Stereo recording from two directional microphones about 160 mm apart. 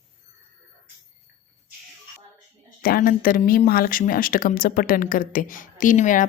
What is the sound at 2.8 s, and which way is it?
Speech, 65° left (ahead or behind).